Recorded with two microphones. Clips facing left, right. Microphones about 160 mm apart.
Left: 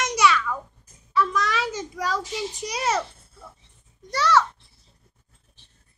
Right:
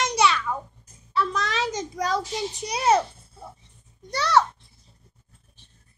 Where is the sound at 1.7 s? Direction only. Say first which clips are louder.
Right 2 dB; 80° right.